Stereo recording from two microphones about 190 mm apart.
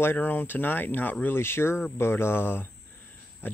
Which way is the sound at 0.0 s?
10° left (ahead or behind).